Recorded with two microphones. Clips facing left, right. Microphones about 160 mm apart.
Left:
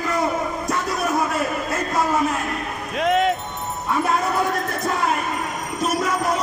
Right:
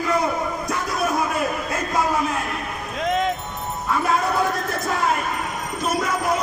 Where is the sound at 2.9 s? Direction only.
70° left (ahead or behind).